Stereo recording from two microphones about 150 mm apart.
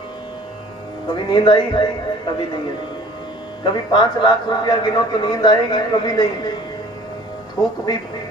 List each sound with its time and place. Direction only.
1.1 s speech: 30° left (ahead or behind)
3.6 s a man's voice: 30° left (ahead or behind)
7.6 s a man's voice: 25° left (ahead or behind)